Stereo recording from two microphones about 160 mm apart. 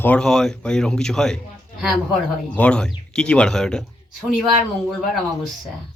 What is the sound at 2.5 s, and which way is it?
Speech, 5° left (ahead or behind).